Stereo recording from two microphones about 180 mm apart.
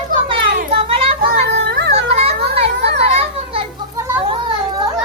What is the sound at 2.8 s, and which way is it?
Children playing, 70° right (ahead or behind).